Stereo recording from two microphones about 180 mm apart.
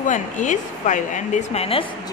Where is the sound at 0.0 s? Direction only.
45° left (ahead or behind).